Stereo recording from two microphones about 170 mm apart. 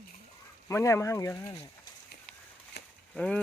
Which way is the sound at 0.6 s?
15° left (ahead or behind).